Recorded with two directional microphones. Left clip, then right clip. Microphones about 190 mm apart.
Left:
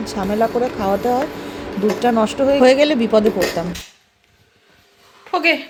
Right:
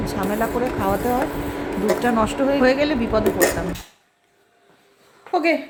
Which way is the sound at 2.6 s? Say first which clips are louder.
Left 8 dB; 25° left (ahead or behind).